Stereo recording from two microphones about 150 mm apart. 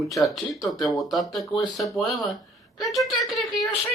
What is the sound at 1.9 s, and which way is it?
Speech, centre (ahead or behind).